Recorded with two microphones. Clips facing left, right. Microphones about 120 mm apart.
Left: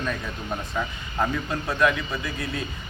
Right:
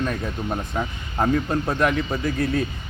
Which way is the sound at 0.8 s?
30° right (ahead or behind).